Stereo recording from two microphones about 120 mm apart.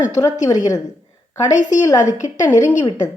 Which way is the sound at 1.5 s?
90° left.